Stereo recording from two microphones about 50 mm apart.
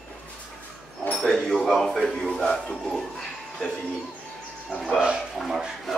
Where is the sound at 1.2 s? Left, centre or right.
Centre.